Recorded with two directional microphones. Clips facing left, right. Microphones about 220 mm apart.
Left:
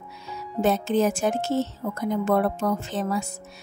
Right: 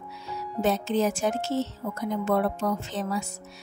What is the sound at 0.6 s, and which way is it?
Speech, 50° left (ahead or behind).